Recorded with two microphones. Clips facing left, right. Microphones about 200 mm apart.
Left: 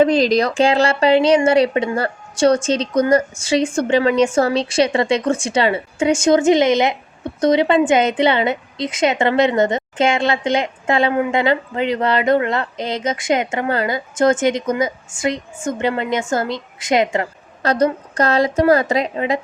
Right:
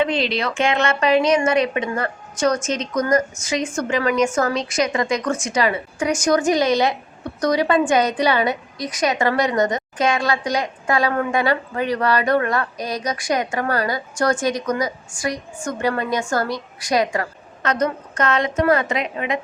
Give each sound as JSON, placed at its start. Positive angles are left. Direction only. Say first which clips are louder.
{"t": 0.0, "sound": "a woman's voice", "louder": "left 7 dB", "side_deg": 40}